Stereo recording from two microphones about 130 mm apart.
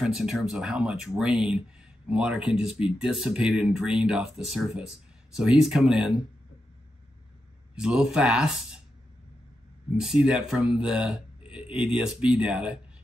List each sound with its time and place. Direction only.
0.0 s speech: 5° right (ahead or behind)
7.7 s speech: 5° right (ahead or behind)
9.9 s speech: 5° right (ahead or behind)